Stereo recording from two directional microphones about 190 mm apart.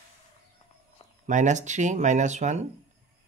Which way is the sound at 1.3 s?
40° right (ahead or behind).